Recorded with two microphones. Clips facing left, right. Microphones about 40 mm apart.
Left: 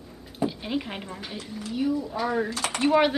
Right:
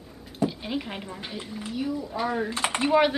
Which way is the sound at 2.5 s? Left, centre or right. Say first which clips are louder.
Right 2 dB; right.